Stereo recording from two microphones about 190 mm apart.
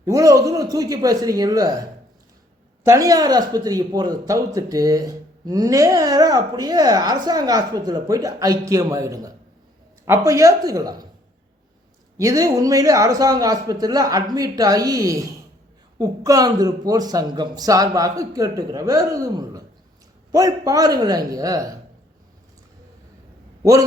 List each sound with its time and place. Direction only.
0.0 s speech: 15° right (ahead or behind)
12.1 s speech: 15° right (ahead or behind)